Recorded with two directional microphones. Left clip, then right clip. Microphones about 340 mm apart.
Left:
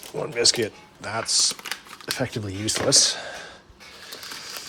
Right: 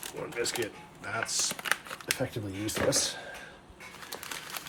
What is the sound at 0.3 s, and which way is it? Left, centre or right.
Speech, centre.